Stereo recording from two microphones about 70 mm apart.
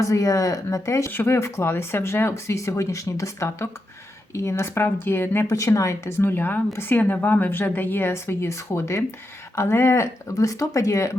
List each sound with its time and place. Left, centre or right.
0.0 s speech: left
1.1 s speech: left
5.5 s speech: left